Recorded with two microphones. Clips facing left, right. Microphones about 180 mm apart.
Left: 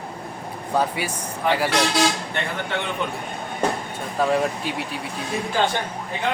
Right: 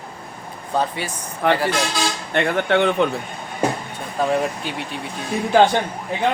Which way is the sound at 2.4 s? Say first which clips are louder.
Right 9 dB; 70° right (ahead or behind).